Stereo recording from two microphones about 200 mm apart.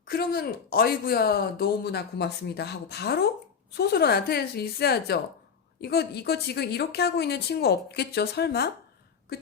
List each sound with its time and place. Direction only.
0.0 s a woman's voice: 50° left (ahead or behind)